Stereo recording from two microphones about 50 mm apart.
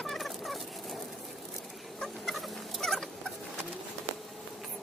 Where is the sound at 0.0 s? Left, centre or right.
Centre.